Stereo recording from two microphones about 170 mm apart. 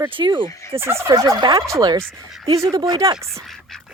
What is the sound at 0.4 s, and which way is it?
Fowl, 20° left (ahead or behind).